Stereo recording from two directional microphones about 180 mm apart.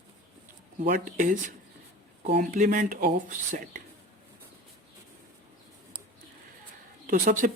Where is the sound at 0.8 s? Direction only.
45° right (ahead or behind).